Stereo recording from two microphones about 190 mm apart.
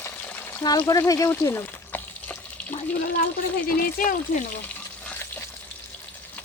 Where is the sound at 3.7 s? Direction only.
50° left (ahead or behind).